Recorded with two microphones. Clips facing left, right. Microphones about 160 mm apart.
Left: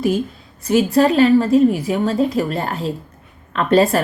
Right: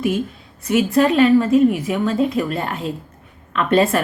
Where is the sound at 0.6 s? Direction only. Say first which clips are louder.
Left 2 dB; 35° left (ahead or behind).